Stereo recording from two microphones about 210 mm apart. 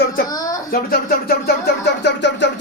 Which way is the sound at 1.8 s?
55° left (ahead or behind).